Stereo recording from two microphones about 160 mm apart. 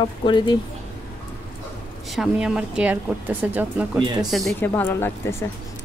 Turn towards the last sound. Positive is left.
turn(degrees=15)  # may be behind; listen again after turning